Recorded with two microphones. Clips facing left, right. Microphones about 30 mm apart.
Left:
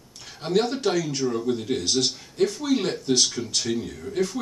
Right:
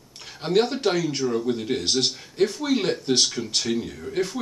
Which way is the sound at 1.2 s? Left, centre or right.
Centre.